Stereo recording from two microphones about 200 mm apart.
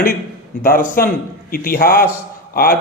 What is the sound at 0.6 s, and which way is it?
Speech, 45° left (ahead or behind).